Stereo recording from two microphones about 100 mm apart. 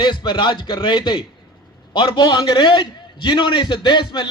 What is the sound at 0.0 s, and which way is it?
A man's voice, 50° left (ahead or behind).